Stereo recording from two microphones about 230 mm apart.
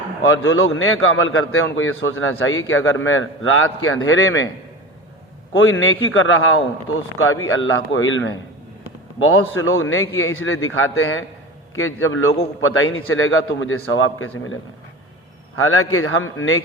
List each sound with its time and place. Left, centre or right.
0.4 s a man's voice: left
5.8 s a man's voice: left